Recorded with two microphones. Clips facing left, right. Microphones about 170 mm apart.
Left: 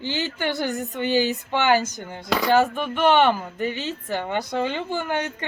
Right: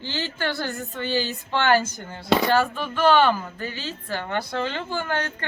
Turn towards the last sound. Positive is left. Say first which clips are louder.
# left 1 dB
turn(degrees=15)  # may be behind; listen again after turning